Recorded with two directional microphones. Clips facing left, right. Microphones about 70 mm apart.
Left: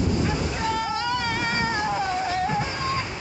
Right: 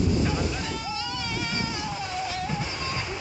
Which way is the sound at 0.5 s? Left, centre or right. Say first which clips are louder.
Left 6 dB; left.